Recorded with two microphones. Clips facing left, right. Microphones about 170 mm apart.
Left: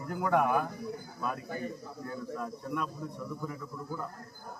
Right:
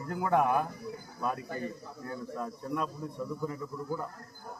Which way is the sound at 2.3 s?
30° right (ahead or behind).